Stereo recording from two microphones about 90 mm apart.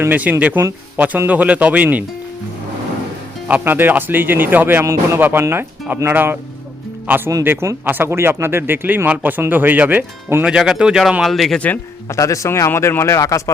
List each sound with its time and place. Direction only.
0.0 s speech: 20° right (ahead or behind)
3.5 s speech: 20° right (ahead or behind)
7.4 s speech: 25° right (ahead or behind)
10.4 s speech: 5° right (ahead or behind)
12.0 s a man's voice: 35° left (ahead or behind)